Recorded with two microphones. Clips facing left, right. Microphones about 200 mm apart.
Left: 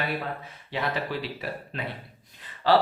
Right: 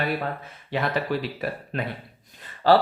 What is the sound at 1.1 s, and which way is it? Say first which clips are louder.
Speech: right 5 dB; 50° right (ahead or behind).